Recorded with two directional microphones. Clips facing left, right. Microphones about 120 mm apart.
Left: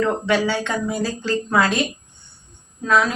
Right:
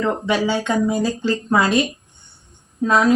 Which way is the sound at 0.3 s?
20° right (ahead or behind).